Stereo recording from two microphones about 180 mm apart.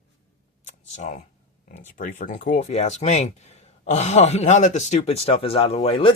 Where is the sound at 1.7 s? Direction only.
50° left (ahead or behind).